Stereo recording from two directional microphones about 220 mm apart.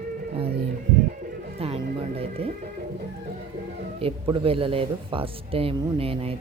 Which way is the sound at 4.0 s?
25° right (ahead or behind).